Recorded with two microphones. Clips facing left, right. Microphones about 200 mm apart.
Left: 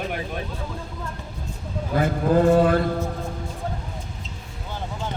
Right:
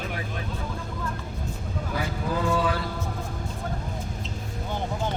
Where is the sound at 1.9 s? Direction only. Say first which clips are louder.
Left 10 dB; 50° left (ahead or behind).